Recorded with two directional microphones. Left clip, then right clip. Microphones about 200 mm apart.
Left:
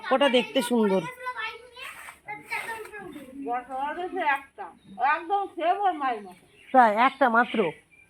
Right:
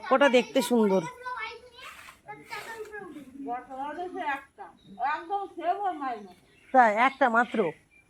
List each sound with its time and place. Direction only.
0.0 s children playing: 5° left (ahead or behind)
3.4 s a woman's voice: 45° left (ahead or behind)
6.7 s a woman's voice: 10° left (ahead or behind)